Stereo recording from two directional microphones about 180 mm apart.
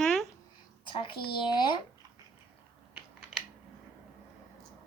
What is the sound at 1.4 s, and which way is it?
Speech, 25° left (ahead or behind).